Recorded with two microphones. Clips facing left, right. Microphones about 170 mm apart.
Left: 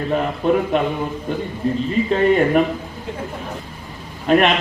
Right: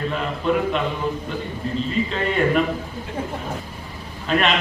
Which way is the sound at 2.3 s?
50° left (ahead or behind).